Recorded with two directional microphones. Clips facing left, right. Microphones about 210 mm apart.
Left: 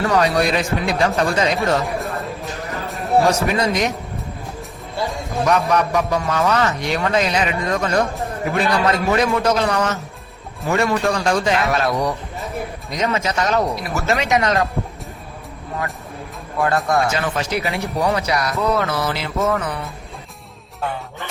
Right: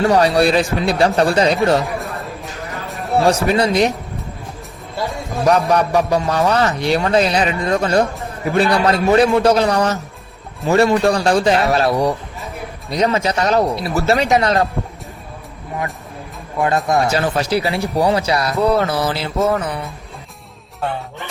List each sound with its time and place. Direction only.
0.1 s a man's voice: 35° right (ahead or behind)
2.8 s a sound: centre (ahead or behind)
3.2 s a man's voice: 30° right (ahead or behind)
5.5 s a man's voice: 35° right (ahead or behind)
16.6 s speech: 20° right (ahead or behind)
17.1 s a man's voice: 35° right (ahead or behind)